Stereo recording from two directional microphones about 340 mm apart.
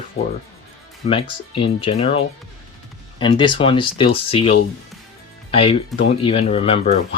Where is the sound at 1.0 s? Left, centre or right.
Centre.